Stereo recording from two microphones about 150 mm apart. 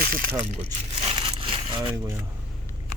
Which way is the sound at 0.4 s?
45° right (ahead or behind).